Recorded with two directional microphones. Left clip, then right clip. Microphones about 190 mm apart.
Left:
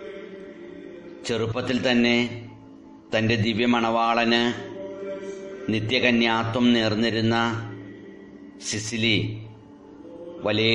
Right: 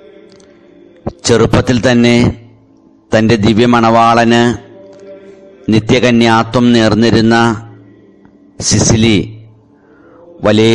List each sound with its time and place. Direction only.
1.2 s a man's voice: 50° right (ahead or behind)
5.7 s a man's voice: 50° right (ahead or behind)
8.9 s a man's voice: 50° right (ahead or behind)
10.4 s a man's voice: 50° right (ahead or behind)